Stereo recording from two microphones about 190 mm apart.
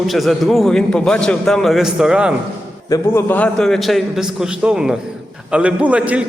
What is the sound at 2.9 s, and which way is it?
A man's voice, 15° left (ahead or behind).